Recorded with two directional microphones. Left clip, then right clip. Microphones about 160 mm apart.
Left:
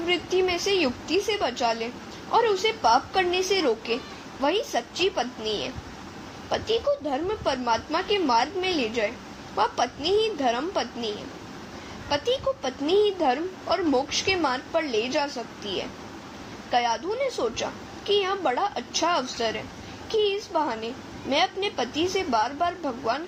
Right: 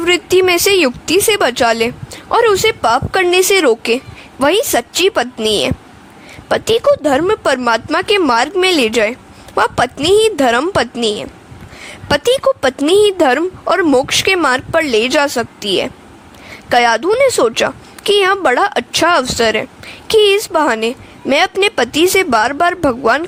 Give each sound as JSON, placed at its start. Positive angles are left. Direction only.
{"t": 0.0, "sound": "a woman's voice", "side_deg": -70}
{"t": 6.5, "sound": "a woman's voice", "side_deg": -85}